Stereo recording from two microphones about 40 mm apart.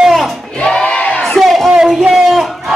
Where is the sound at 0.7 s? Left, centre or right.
Centre.